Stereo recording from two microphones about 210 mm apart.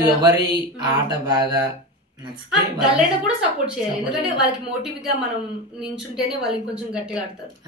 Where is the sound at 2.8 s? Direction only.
5° right (ahead or behind).